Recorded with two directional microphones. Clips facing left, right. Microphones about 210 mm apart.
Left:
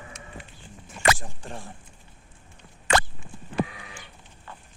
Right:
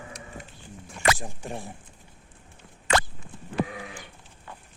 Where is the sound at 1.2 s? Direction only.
10° right (ahead or behind).